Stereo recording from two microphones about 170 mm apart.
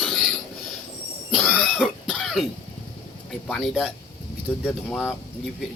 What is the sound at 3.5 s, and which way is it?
Speech, centre (ahead or behind).